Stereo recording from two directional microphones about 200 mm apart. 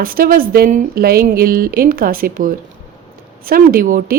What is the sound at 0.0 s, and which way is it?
Speech, 45° right (ahead or behind).